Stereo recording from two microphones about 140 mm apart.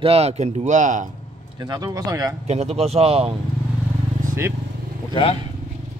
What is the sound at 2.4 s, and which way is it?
Speech, 50° right (ahead or behind).